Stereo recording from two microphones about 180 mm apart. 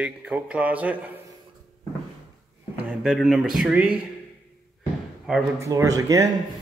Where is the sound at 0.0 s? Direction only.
5° right (ahead or behind).